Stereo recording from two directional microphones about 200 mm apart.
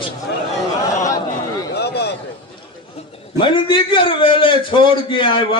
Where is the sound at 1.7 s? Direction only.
55° left (ahead or behind).